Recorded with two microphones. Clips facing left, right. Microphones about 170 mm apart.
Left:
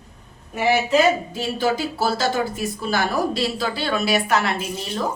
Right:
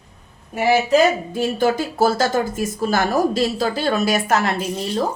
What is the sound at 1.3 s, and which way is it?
A woman's voice, 50° right (ahead or behind).